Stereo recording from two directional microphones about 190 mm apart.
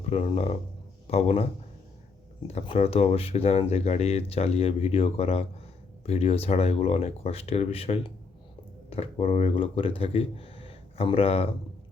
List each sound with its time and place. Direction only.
0.0 s speech: 35° left (ahead or behind)
2.5 s speech: 35° left (ahead or behind)